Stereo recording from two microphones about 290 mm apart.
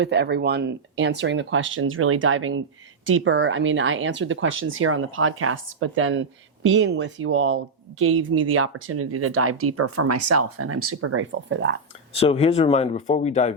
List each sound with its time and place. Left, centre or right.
0.0 s speech: right
12.1 s speech: centre